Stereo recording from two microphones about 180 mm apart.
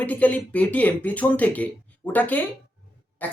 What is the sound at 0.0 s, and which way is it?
Speech, 10° left (ahead or behind).